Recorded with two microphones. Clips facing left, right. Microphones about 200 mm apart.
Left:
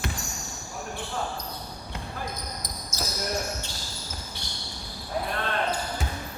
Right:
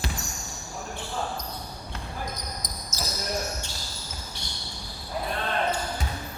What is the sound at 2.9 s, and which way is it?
Basketball bounce, 10° left (ahead or behind).